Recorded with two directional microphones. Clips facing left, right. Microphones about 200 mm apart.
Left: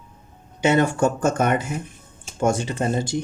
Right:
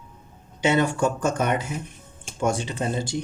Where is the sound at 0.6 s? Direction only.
45° left (ahead or behind).